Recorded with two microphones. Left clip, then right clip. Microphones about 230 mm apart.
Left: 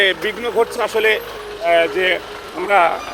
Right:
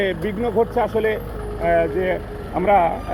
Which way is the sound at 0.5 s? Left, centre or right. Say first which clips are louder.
Left 1 dB; centre.